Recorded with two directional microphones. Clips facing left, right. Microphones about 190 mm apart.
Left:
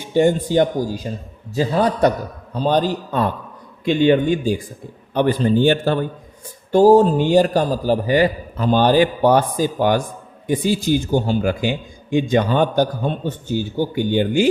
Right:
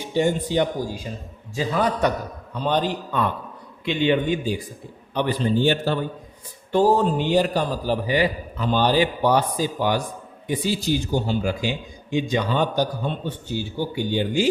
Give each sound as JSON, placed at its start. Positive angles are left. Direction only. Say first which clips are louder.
{"t": 0.1, "sound": "a man's voice", "louder": "left 6 dB", "side_deg": 50}
{"t": 6.7, "sound": "speech", "louder": "left 7 dB", "side_deg": 40}